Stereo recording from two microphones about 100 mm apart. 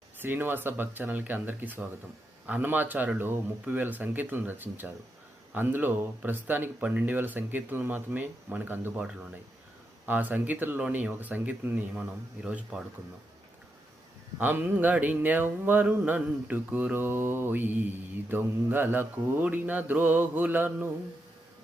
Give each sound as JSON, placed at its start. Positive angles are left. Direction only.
{"t": 0.2, "sound": "speech", "side_deg": -20}
{"t": 14.3, "sound": "speech", "side_deg": -20}